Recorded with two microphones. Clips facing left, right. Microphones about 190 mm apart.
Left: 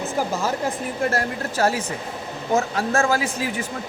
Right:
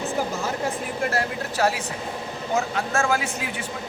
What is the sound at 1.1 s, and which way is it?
A woman's voice, 45° left (ahead or behind).